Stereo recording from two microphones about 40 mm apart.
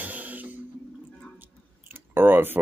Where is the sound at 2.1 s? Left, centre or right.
Right.